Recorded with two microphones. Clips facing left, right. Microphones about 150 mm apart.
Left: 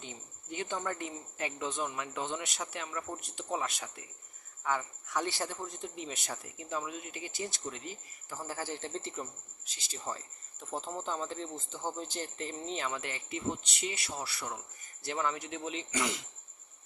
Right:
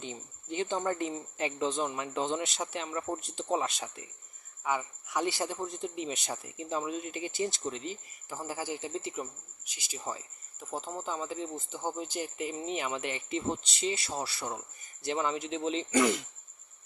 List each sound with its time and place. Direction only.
0.0 s speech: 25° right (ahead or behind)
4.6 s speech: 15° right (ahead or behind)
13.5 s speech: 30° right (ahead or behind)
15.9 s speech: 50° right (ahead or behind)